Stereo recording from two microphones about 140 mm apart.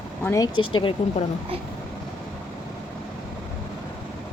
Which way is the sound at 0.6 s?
35° left (ahead or behind).